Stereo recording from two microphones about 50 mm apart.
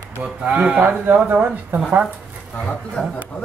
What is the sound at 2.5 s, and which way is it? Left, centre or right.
Speech, centre.